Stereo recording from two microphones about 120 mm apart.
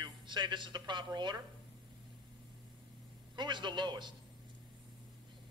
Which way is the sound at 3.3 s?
40° right (ahead or behind).